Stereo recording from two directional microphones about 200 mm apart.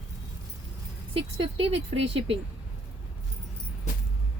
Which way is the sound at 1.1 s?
25° right (ahead or behind).